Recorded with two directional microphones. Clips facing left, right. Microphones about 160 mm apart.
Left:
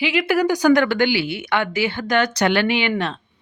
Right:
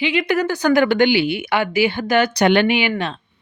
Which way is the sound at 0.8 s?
20° right (ahead or behind).